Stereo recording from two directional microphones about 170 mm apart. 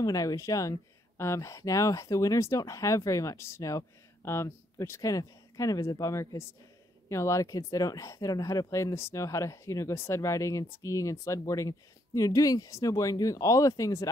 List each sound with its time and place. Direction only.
0.0 s speech: 20° left (ahead or behind)